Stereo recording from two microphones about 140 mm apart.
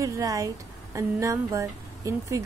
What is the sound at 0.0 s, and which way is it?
Speech, 25° right (ahead or behind).